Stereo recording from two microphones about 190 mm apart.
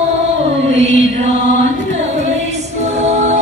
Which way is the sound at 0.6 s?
35° right (ahead or behind).